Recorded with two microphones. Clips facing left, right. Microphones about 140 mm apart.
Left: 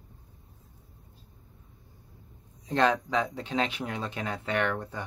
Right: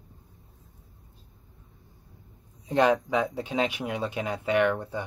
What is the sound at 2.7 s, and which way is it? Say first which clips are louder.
Speech: right 3 dB; 10° right (ahead or behind).